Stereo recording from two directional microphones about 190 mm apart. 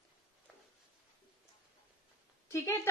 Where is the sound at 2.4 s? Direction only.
15° left (ahead or behind).